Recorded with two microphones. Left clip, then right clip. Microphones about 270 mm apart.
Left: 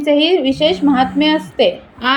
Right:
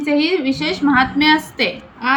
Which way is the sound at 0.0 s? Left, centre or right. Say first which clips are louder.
Left 4 dB; centre.